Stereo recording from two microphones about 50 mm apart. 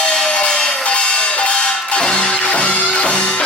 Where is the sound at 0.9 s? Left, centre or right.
Centre.